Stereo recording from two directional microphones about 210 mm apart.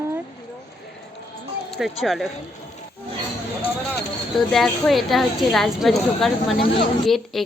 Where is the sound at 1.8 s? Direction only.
Centre (ahead or behind).